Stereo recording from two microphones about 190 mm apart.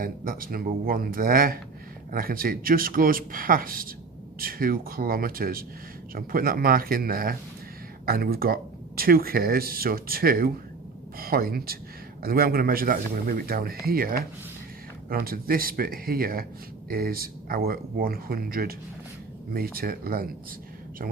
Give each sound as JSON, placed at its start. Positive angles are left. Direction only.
{"t": 0.0, "sound": "speech", "side_deg": -50}